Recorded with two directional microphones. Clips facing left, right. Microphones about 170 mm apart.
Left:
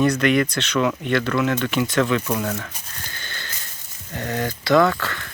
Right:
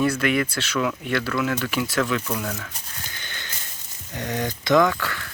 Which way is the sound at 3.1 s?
15° right (ahead or behind).